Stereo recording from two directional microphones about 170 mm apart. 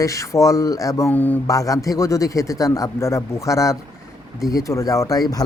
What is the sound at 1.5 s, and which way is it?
A man's voice, 20° left (ahead or behind).